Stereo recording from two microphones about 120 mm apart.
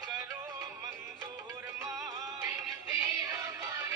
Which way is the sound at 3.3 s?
30° right (ahead or behind).